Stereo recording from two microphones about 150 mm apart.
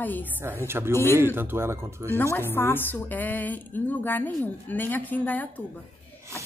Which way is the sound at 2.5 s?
15° left (ahead or behind).